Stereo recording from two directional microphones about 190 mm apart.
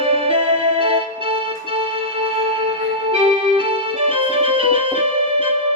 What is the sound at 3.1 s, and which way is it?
Music, 30° right (ahead or behind).